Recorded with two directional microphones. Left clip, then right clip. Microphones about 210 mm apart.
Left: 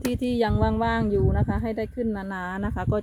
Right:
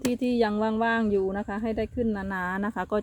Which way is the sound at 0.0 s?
5° left (ahead or behind).